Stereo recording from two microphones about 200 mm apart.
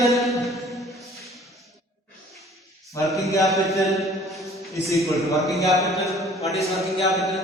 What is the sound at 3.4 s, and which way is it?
Speech, centre (ahead or behind).